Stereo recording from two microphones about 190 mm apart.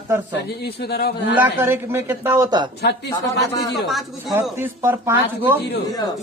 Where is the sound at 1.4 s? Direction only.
10° right (ahead or behind).